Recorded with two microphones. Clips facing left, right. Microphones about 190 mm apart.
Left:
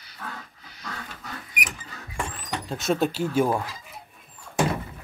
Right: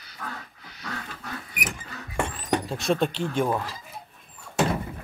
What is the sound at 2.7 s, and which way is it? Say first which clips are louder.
Speech: left 5 dB; centre (ahead or behind).